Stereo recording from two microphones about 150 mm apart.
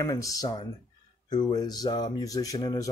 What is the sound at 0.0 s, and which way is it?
Speech, 20° left (ahead or behind).